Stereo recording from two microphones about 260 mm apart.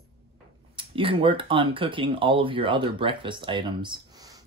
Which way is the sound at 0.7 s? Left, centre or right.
Centre.